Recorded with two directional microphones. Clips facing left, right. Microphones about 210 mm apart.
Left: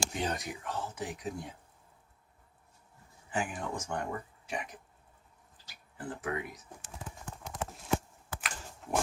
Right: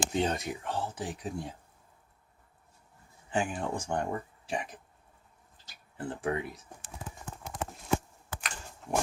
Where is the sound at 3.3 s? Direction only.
30° right (ahead or behind).